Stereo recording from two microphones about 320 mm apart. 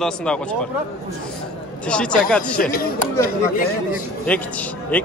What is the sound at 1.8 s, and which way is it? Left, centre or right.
Speech, centre.